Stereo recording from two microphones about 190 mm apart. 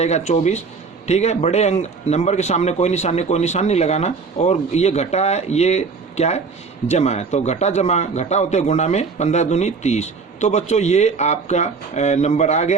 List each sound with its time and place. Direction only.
0.0 s a man's voice: 35° left (ahead or behind)